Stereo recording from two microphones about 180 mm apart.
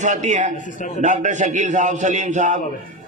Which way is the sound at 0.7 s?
45° left (ahead or behind).